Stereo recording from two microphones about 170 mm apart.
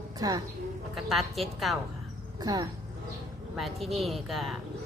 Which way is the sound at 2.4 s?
20° right (ahead or behind).